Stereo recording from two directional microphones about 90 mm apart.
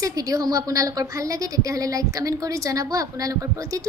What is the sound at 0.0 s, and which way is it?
A woman's voice, 40° right (ahead or behind).